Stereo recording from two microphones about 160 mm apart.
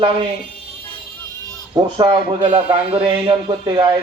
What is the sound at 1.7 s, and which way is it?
A man's voice, 30° right (ahead or behind).